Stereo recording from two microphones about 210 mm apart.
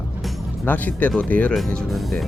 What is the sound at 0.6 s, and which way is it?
Speech, 10° left (ahead or behind).